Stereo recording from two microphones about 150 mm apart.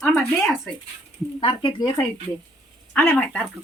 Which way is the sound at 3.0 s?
10° left (ahead or behind).